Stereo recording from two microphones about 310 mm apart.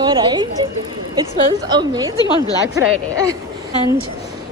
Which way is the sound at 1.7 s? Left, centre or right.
Centre.